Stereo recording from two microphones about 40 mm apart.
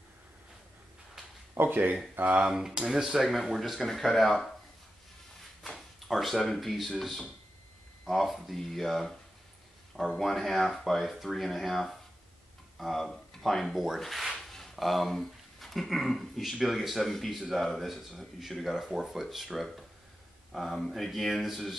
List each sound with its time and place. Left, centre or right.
1.5 s speech: right
2.2 s speech: right
2.5 s speech: centre
5.9 s speech: centre
8.0 s speech: centre
10.1 s speech: centre
14.5 s a sound: centre
16.6 s speech: centre